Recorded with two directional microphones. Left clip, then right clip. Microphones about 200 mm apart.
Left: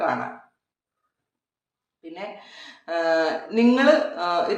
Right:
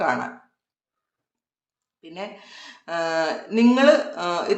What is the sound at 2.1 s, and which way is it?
Speech, 25° right (ahead or behind).